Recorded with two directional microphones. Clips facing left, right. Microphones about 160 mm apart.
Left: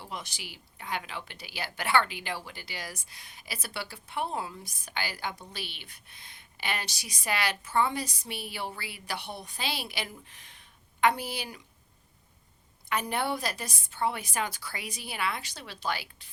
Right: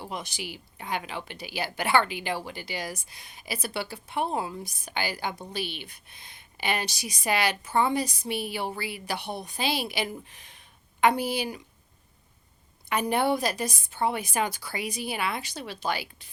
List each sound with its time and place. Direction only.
0.1 s a woman's voice: 15° right (ahead or behind)
12.9 s a woman's voice: 15° right (ahead or behind)